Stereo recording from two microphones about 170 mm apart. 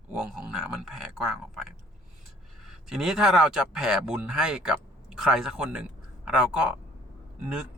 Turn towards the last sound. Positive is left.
turn(degrees=-5)  # may be behind; listen again after turning